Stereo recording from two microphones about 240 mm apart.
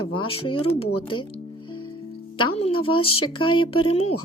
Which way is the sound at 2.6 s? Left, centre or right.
Left.